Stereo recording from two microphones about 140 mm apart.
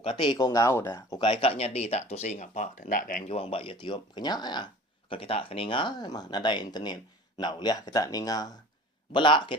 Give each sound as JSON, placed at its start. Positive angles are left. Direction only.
{"t": 0.0, "sound": "speech", "side_deg": 35}
{"t": 1.2, "sound": "speech", "side_deg": 40}
{"t": 3.2, "sound": "speech", "side_deg": 45}